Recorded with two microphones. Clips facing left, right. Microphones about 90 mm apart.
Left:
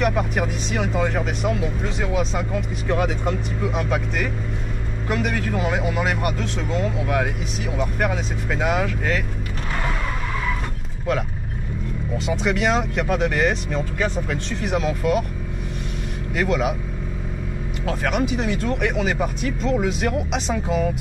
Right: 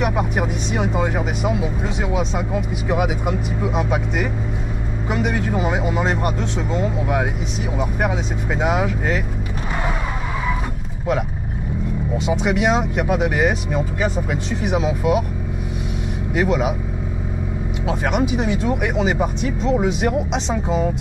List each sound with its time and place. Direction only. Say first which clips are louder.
0.0 s speech: right 1 dB; 5° right (ahead or behind)
12.2 s speech: right 2 dB; 5° right (ahead or behind)
16.3 s speech: right 2 dB; 5° right (ahead or behind)
17.8 s speech: right 2 dB; 5° right (ahead or behind)